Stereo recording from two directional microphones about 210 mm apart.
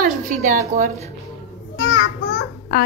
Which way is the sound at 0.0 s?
40° right (ahead or behind).